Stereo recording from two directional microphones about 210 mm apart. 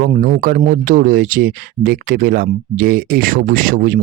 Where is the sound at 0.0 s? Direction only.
40° right (ahead or behind).